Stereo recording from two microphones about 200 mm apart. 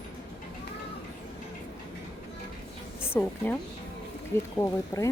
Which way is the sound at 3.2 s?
10° left (ahead or behind).